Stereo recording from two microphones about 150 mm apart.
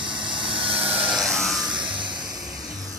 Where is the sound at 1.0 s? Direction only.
Centre (ahead or behind).